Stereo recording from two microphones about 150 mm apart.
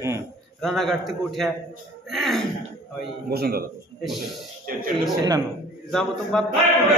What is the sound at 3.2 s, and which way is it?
Speech, 90° right.